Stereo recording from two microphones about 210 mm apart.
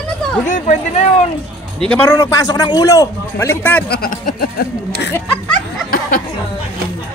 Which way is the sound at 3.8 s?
45° left (ahead or behind).